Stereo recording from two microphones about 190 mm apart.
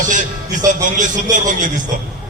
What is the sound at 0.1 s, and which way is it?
A man's voice, 40° right (ahead or behind).